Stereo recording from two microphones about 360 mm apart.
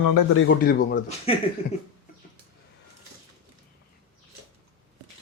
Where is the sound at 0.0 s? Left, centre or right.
Left.